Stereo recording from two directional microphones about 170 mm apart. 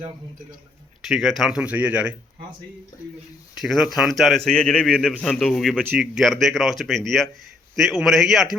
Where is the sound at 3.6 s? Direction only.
Centre (ahead or behind).